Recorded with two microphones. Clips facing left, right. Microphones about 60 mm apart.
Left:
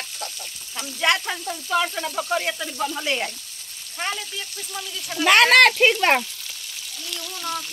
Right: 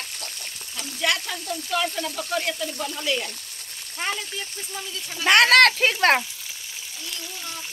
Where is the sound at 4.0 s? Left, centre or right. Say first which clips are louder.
Even; centre.